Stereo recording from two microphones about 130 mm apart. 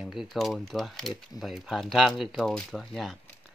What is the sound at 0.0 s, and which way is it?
Speech, centre (ahead or behind).